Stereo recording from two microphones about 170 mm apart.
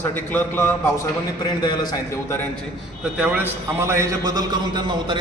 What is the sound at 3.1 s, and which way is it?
A man's voice, 10° right (ahead or behind).